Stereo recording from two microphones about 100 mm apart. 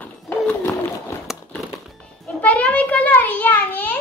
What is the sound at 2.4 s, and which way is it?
A child's voice, 15° left (ahead or behind).